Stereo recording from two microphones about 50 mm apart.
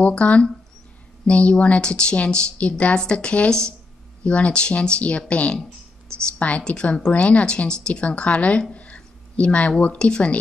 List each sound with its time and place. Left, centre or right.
0.0 s a woman's voice: left